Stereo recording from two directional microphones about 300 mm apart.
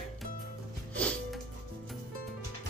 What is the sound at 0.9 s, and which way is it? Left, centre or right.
Music, centre.